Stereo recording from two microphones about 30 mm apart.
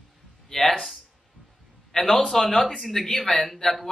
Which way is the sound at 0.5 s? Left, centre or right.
Centre.